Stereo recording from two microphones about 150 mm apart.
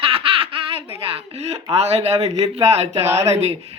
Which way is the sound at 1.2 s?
45° right (ahead or behind).